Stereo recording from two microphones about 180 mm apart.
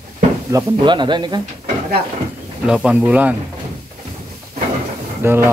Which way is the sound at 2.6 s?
5° right (ahead or behind).